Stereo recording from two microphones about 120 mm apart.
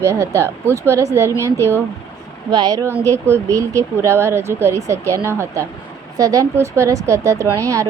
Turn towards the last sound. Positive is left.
turn(degrees=-25)  # may be behind; listen again after turning